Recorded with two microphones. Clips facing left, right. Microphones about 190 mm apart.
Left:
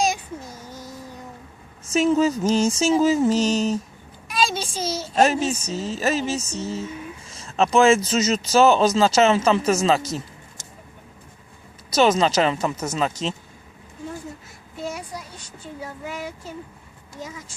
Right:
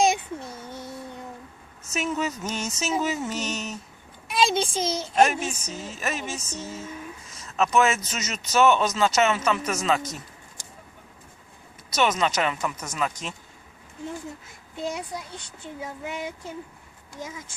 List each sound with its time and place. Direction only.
0.4 s a sound: 30° right (ahead or behind)
1.9 s speech: 30° left (ahead or behind)
4.3 s a sound: 20° right (ahead or behind)
5.1 s speech: 30° left (ahead or behind)
11.9 s speech: 30° left (ahead or behind)
14.8 s speech: 20° right (ahead or behind)